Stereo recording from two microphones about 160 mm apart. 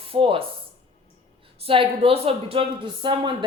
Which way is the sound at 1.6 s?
35° right (ahead or behind).